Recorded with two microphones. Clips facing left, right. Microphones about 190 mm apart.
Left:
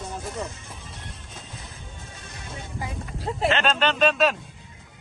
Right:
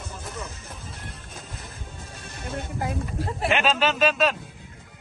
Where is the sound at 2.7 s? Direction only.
60° right (ahead or behind).